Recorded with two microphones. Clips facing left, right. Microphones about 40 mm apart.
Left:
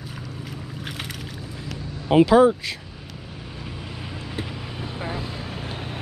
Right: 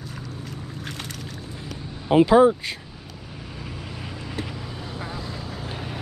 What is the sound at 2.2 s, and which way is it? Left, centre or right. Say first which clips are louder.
Speech: even; left.